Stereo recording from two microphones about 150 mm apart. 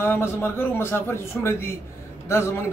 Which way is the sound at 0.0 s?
15° left (ahead or behind).